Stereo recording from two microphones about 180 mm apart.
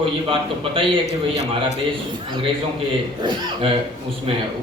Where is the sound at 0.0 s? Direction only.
30° right (ahead or behind).